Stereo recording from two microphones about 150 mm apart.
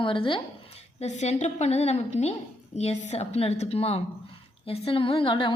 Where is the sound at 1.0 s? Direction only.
50° left (ahead or behind).